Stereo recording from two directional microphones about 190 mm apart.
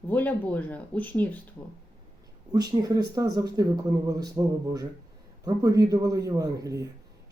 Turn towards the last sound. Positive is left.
turn(degrees=-20)  # may be behind; listen again after turning